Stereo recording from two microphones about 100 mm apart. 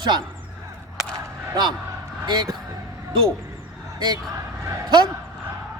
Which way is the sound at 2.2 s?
45° right (ahead or behind).